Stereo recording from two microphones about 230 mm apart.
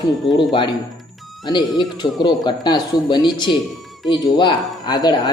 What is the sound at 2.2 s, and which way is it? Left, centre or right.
Speech, centre.